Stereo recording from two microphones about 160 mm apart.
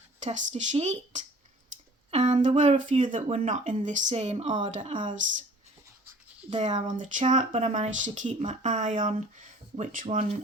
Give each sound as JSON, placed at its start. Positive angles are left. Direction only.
{"t": 0.2, "sound": "speech", "side_deg": -45}
{"t": 6.5, "sound": "speech", "side_deg": -40}